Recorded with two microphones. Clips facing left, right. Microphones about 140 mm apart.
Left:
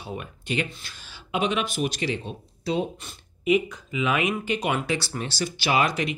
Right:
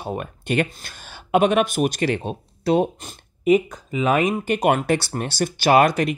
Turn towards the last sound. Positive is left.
turn(degrees=-50)  # may be behind; listen again after turning